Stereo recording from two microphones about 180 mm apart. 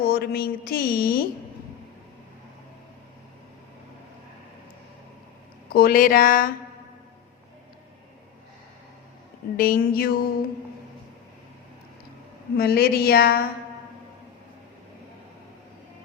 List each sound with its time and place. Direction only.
0.0 s speech: 60° left (ahead or behind)
5.6 s speech: 55° left (ahead or behind)
9.6 s speech: 55° left (ahead or behind)
12.5 s speech: 60° left (ahead or behind)